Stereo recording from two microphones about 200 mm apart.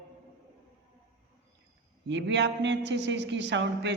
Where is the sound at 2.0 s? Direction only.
60° right (ahead or behind).